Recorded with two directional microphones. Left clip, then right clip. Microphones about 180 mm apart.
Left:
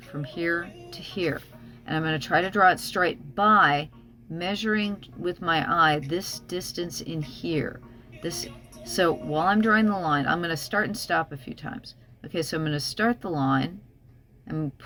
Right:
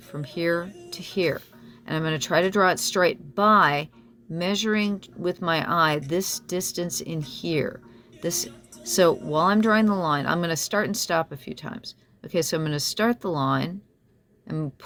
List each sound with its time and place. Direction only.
0.1 s speech: 50° right (ahead or behind)
9.0 s speech: 50° right (ahead or behind)